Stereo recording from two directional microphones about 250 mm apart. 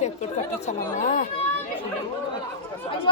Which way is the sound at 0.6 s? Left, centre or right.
Left.